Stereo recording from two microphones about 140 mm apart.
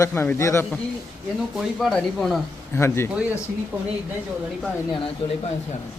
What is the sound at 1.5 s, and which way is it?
Speech, 5° left (ahead or behind).